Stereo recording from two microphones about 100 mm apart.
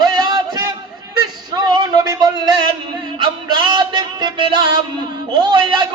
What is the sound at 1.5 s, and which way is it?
A man's voice, 45° right (ahead or behind).